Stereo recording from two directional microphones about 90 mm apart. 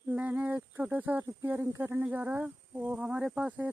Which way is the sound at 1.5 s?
25° right (ahead or behind).